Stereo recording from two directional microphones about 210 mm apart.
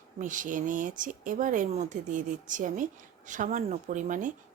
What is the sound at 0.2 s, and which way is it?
A woman's voice, 40° right (ahead or behind).